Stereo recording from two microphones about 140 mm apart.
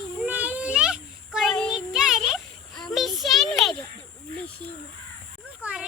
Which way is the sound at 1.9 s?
5° right (ahead or behind).